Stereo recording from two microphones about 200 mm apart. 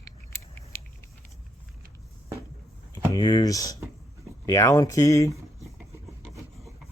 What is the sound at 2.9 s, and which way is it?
Speech, 20° left (ahead or behind).